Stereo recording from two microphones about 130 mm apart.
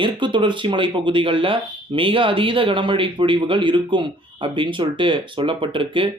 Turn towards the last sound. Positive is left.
turn(degrees=-40)  # may be behind; listen again after turning